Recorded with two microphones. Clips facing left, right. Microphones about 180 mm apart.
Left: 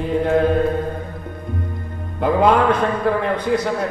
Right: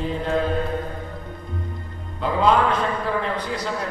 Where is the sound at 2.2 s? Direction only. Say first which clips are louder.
Left 4 dB; 55° left (ahead or behind).